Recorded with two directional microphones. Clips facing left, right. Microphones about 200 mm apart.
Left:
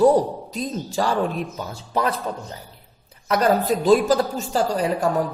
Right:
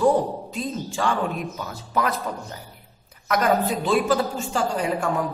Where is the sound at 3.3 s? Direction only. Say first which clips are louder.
Left 2 dB; 35° left (ahead or behind).